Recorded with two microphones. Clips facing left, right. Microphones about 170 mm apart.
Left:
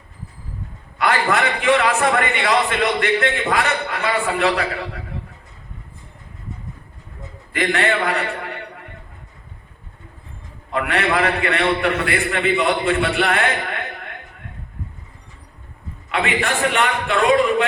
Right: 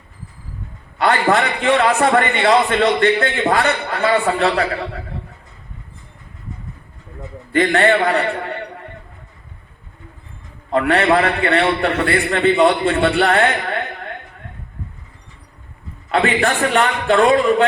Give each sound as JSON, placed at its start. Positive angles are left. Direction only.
{"t": 0.9, "sound": "a man's voice", "side_deg": -30}
{"t": 7.5, "sound": "a man's voice", "side_deg": -35}
{"t": 10.7, "sound": "a man's voice", "side_deg": -35}
{"t": 16.1, "sound": "a man's voice", "side_deg": -35}